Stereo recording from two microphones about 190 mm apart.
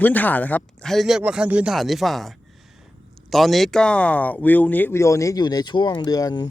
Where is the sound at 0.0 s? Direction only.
10° left (ahead or behind).